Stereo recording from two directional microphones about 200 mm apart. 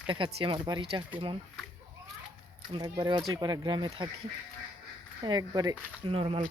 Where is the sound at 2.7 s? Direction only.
20° right (ahead or behind).